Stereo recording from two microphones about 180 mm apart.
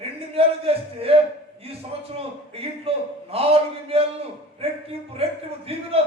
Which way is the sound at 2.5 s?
35° right (ahead or behind).